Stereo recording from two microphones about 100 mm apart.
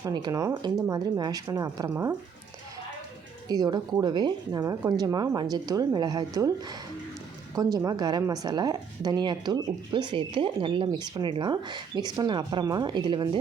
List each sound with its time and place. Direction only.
0.0 s speech: 45° right (ahead or behind)
3.5 s a woman's voice: 45° right (ahead or behind)
7.5 s a woman's voice: 35° right (ahead or behind)